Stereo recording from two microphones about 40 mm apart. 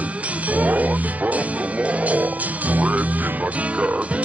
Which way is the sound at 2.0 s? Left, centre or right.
Right.